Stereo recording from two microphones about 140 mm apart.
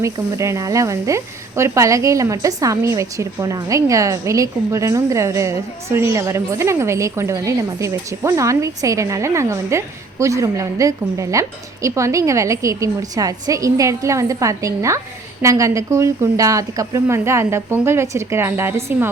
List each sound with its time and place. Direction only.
0.0 s speech: 20° right (ahead or behind)